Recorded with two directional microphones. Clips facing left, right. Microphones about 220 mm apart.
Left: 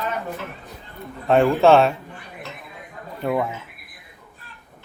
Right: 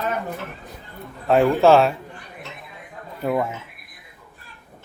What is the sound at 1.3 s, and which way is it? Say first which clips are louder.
Speech: even; centre (ahead or behind).